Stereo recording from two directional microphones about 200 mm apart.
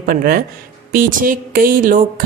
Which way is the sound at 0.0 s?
45° right (ahead or behind).